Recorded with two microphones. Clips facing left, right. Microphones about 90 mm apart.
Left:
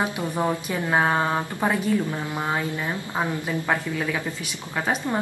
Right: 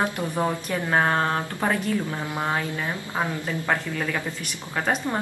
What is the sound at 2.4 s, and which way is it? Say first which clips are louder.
A woman's voice: even; 15° left (ahead or behind).